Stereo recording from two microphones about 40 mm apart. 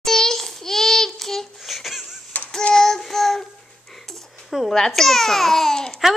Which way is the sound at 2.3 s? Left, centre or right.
Left.